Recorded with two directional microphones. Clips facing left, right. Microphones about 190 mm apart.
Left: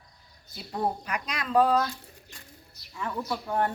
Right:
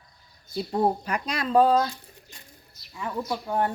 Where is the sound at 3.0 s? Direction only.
15° right (ahead or behind).